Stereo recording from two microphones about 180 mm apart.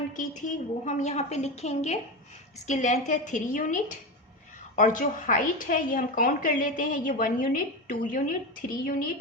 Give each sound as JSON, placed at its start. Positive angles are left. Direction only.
{"t": 0.1, "sound": "a woman's voice", "side_deg": 45}
{"t": 4.8, "sound": "a woman's voice", "side_deg": 45}